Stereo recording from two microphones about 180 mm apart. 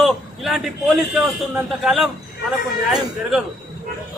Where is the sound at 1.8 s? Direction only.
Centre (ahead or behind).